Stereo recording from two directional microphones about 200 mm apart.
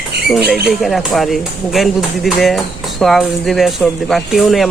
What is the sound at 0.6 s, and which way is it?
Speech, centre (ahead or behind).